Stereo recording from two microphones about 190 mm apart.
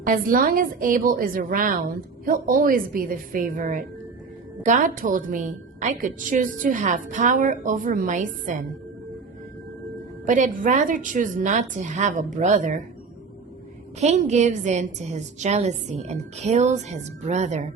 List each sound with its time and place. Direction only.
0.0 s a woman's voice: 45° right (ahead or behind)
10.2 s a woman's voice: 40° right (ahead or behind)
14.0 s a woman's voice: 35° right (ahead or behind)